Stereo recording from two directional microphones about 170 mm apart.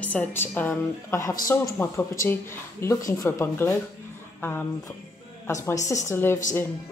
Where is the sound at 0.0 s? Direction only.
10° left (ahead or behind).